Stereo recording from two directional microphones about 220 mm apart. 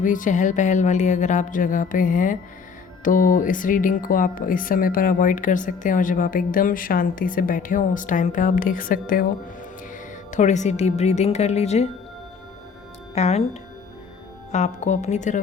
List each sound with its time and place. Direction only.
0.0 s speech: 35° left (ahead or behind)
13.1 s speech: 30° left (ahead or behind)